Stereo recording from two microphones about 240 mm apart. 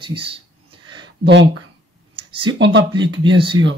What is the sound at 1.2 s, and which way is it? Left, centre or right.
Speech, right.